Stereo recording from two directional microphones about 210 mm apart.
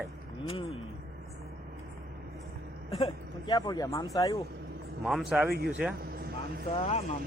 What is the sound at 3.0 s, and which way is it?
A man's voice, 20° left (ahead or behind).